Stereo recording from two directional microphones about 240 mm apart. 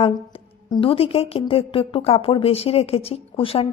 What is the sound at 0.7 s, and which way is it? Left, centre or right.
A woman's voice, left.